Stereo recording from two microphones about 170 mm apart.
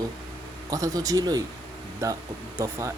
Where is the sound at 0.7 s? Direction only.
20° right (ahead or behind).